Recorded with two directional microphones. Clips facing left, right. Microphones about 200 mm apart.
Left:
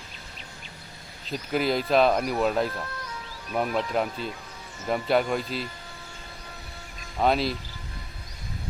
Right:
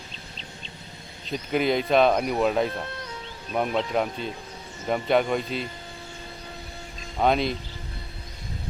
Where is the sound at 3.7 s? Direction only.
Centre (ahead or behind).